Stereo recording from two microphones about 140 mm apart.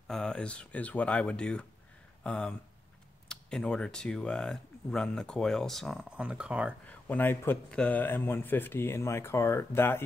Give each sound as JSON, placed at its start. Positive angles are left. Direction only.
{"t": 0.1, "sound": "speech", "side_deg": 5}
{"t": 6.9, "sound": "speech", "side_deg": 10}